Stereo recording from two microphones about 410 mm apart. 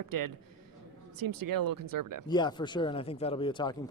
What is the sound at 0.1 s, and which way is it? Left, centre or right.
Speech, right.